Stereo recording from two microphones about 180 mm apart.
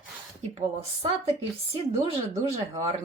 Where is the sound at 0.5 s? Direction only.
35° right (ahead or behind).